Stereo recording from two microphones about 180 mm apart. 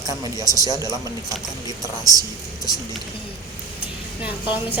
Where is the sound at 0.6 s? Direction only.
20° right (ahead or behind).